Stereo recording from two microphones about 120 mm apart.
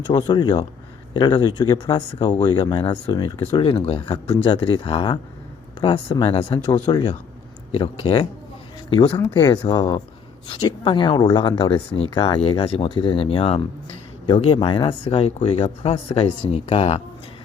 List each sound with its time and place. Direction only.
0.1 s speech: 40° left (ahead or behind)
6.8 s speech: 40° left (ahead or behind)
15.0 s speech: 60° left (ahead or behind)
15.6 s speech: 45° left (ahead or behind)
16.1 s speech: 60° left (ahead or behind)